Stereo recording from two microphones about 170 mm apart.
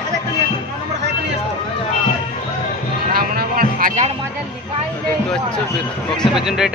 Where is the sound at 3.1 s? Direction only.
60° right (ahead or behind).